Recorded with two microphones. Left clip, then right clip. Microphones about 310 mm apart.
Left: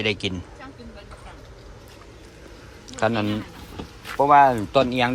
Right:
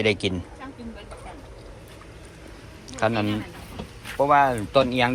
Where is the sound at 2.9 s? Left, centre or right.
Centre.